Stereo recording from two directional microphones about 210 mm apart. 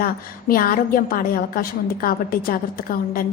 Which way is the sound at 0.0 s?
45° left (ahead or behind).